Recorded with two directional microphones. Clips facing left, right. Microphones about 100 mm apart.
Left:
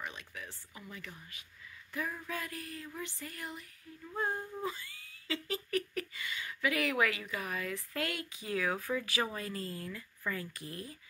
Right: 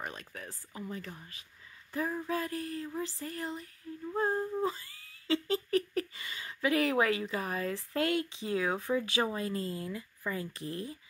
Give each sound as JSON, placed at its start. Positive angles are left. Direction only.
{"t": 0.0, "sound": "speech", "side_deg": -45}
{"t": 3.9, "sound": "humming", "side_deg": -30}
{"t": 4.2, "sound": "speech", "side_deg": -35}